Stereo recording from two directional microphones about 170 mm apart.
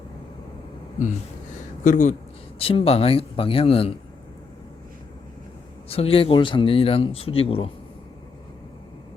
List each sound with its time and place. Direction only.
1.8 s speech: 45° left (ahead or behind)
2.6 s speech: 35° left (ahead or behind)
5.9 s speech: 35° left (ahead or behind)